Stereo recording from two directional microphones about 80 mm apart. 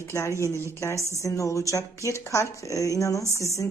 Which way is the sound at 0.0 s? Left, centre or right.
Left.